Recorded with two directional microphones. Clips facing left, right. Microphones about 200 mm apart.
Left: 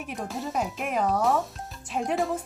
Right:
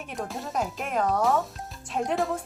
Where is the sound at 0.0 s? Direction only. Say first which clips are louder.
Left 1 dB; centre (ahead or behind).